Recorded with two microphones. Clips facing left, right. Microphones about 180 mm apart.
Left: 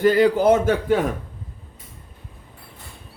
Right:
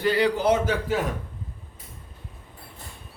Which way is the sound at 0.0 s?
45° left (ahead or behind).